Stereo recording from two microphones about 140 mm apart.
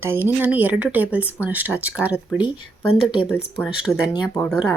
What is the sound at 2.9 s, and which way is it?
Speech, 40° left (ahead or behind).